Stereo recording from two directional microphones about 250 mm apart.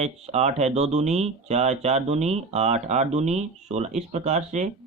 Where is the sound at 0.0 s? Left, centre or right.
Right.